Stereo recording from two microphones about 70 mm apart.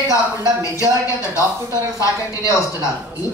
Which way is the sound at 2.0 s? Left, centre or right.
Left.